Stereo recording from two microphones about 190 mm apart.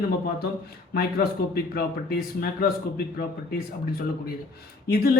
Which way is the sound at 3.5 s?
50° left (ahead or behind).